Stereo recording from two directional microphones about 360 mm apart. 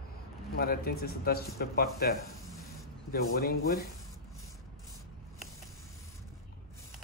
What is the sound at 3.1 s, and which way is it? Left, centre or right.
Speech, left.